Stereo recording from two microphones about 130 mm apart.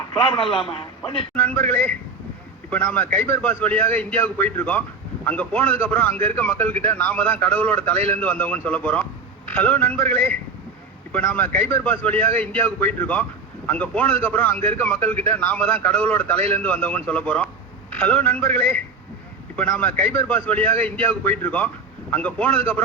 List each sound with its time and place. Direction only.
0.1 s a man's voice: 45° left (ahead or behind)
1.4 s a man's voice: 10° left (ahead or behind)